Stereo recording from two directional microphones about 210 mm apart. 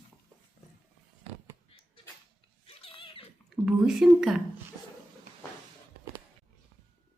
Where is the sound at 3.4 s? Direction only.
Centre (ahead or behind).